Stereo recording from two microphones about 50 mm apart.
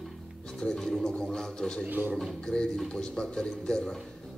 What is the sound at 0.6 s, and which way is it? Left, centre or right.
Speech, centre.